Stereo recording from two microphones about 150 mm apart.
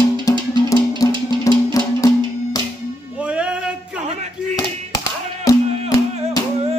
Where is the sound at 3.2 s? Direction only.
5° right (ahead or behind).